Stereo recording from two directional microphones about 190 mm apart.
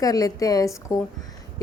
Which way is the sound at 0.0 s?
20° left (ahead or behind).